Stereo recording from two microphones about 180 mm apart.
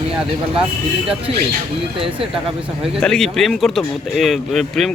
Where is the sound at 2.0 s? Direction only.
30° right (ahead or behind).